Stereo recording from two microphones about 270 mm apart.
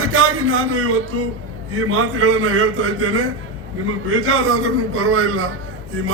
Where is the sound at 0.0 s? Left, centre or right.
Right.